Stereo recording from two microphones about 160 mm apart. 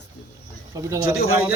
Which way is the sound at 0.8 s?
20° right (ahead or behind).